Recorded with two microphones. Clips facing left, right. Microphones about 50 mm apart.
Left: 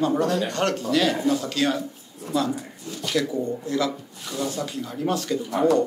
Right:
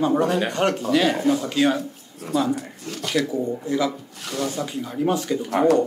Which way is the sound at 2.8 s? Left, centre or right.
Right.